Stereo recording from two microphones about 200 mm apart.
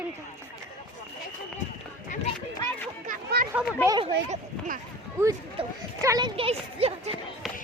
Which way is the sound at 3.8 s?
20° right (ahead or behind).